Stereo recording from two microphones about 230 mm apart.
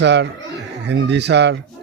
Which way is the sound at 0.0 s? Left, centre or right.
Right.